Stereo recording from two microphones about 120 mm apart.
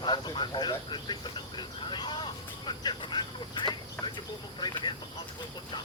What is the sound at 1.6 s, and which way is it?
Speech, 40° left (ahead or behind).